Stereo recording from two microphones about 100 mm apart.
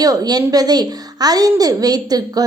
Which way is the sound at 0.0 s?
40° right (ahead or behind).